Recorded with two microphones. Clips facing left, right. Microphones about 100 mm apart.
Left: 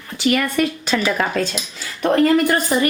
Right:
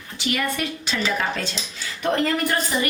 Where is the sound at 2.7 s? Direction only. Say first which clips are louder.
Left 6 dB; 50° left (ahead or behind).